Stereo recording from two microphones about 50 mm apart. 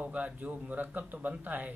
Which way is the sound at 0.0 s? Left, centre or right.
Right.